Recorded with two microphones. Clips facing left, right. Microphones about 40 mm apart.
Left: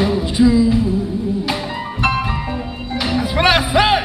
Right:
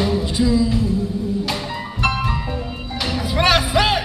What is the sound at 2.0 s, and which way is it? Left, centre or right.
Music, centre.